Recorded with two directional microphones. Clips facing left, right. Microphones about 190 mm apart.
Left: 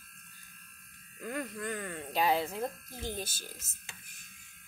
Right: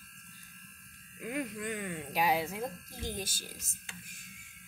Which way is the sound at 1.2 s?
15° right (ahead or behind).